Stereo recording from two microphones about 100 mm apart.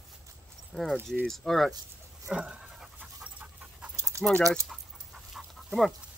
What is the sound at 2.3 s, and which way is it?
Pant, 10° right (ahead or behind).